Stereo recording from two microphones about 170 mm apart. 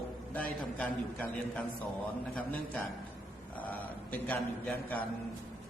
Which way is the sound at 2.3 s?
5° left (ahead or behind).